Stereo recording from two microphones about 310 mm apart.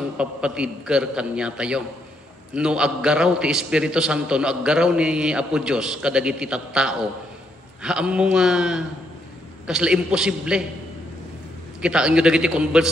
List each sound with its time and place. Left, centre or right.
0.2 s a man's voice: centre
11.8 s a man's voice: centre